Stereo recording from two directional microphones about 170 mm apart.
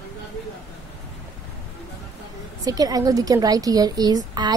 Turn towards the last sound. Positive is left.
turn(degrees=-20)  # may be behind; listen again after turning